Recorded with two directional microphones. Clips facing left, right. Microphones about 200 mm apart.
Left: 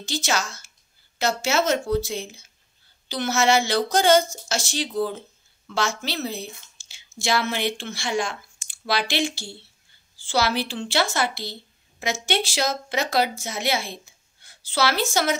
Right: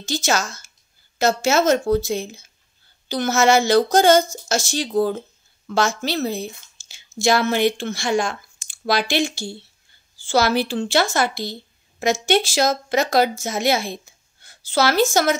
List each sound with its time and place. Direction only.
0.0 s a woman's voice: 45° right (ahead or behind)